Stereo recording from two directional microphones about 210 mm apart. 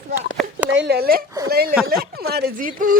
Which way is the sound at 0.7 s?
55° right (ahead or behind).